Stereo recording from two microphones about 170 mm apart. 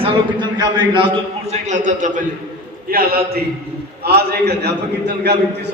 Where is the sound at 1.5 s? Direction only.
45° right (ahead or behind).